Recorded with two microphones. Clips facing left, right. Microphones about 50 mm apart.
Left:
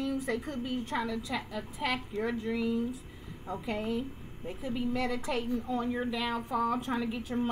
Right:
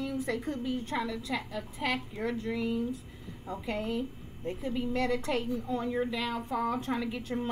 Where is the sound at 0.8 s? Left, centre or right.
Centre.